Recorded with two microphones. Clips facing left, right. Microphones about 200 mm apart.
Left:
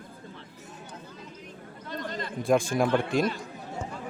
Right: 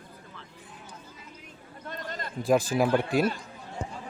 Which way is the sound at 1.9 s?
45° right (ahead or behind).